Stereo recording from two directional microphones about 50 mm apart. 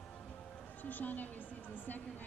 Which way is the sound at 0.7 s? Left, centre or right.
Left.